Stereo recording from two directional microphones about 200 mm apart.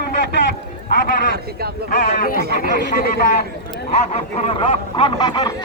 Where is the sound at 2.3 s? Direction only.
50° right (ahead or behind).